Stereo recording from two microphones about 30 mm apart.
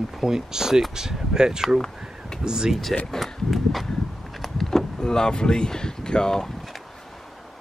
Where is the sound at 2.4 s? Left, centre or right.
Right.